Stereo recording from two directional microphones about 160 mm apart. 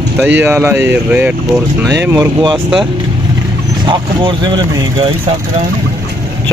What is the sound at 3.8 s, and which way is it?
Speech, 30° right (ahead or behind).